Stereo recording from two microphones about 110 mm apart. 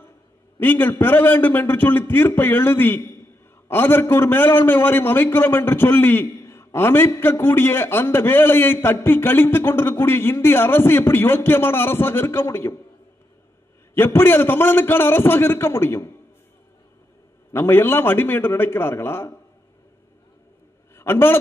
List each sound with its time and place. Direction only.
0.6 s a man's voice: 20° left (ahead or behind)
13.9 s a man's voice: 20° left (ahead or behind)
17.5 s a man's voice: 20° left (ahead or behind)
20.9 s a man's voice: 20° left (ahead or behind)